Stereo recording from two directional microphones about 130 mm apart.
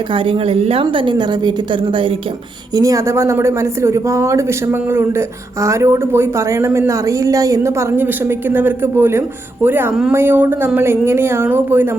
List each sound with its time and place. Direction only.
0.1 s a woman's voice: 45° right (ahead or behind)
2.7 s speech: 25° right (ahead or behind)